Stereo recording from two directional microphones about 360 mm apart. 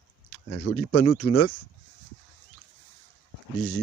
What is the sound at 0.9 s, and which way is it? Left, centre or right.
Speech, left.